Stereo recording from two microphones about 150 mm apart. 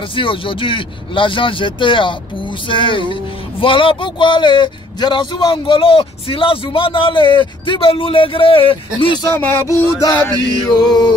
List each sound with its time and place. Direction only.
0.1 s speech: 35° left (ahead or behind)
9.2 s music: 15° left (ahead or behind)
10.7 s music: 30° left (ahead or behind)